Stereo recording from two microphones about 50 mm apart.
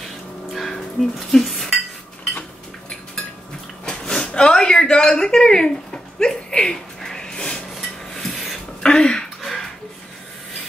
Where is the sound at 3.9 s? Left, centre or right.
Centre.